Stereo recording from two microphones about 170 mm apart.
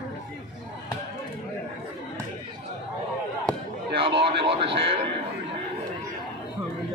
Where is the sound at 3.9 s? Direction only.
30° right (ahead or behind).